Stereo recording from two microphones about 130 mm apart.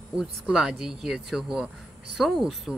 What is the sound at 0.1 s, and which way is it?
Speech, 5° right (ahead or behind).